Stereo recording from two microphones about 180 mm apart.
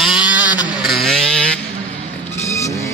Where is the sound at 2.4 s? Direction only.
15° left (ahead or behind).